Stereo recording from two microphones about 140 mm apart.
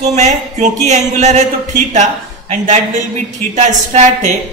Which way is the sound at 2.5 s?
60° right (ahead or behind).